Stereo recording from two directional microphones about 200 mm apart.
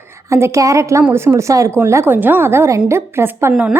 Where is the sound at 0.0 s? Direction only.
15° right (ahead or behind).